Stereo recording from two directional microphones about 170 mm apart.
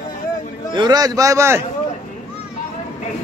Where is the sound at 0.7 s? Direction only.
25° right (ahead or behind).